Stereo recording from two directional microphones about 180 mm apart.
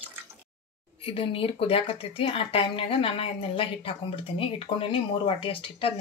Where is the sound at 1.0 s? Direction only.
30° left (ahead or behind).